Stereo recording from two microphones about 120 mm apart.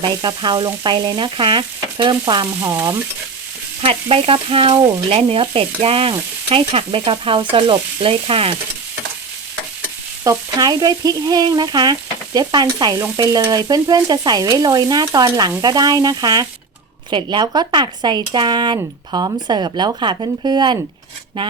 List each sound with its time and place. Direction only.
0.0 s stir: 40° right (ahead or behind)
3.8 s stir: 50° right (ahead or behind)
10.2 s stir: 30° right (ahead or behind)